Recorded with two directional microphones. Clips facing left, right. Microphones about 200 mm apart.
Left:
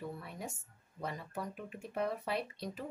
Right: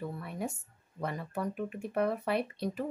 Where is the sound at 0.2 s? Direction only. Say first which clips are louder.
Right 8 dB; 60° right (ahead or behind).